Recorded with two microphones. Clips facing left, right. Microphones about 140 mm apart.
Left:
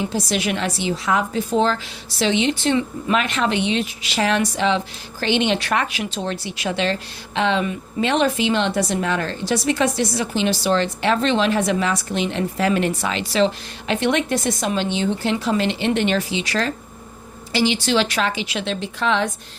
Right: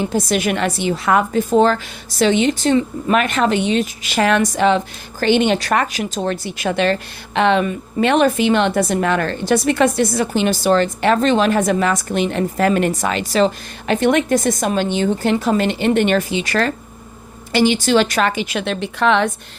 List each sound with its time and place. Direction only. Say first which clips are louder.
0.1 s a woman's voice: right 4 dB; 50° right (ahead or behind)